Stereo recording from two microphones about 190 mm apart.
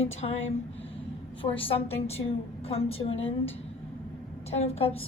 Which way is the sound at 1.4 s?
30° left (ahead or behind).